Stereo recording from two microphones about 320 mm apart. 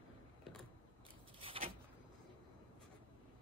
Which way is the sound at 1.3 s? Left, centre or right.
Centre.